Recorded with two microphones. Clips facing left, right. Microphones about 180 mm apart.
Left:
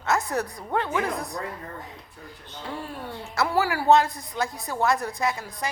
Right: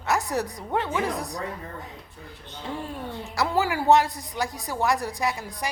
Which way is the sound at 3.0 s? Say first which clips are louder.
Left 1 dB; 15° right (ahead or behind).